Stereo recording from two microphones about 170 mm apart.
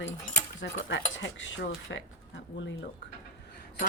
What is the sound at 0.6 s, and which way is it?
Speech, 90° left.